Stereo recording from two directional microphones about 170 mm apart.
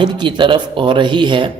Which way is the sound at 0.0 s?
25° right (ahead or behind).